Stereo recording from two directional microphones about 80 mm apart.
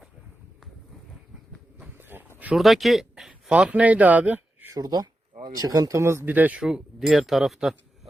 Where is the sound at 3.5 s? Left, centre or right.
Centre.